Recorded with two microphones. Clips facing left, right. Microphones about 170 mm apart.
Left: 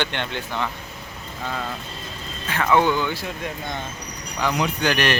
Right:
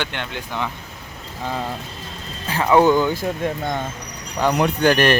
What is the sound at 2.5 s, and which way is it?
Speech, 35° right (ahead or behind).